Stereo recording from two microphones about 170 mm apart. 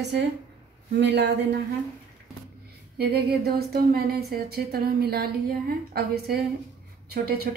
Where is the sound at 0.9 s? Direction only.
75° right (ahead or behind).